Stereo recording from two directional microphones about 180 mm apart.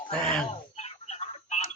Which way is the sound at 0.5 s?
35° left (ahead or behind).